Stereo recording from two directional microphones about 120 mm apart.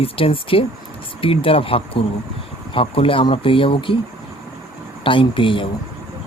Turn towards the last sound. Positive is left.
turn(degrees=45)  # may be behind; listen again after turning